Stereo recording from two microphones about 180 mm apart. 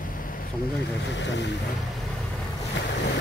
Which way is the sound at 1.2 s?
85° left.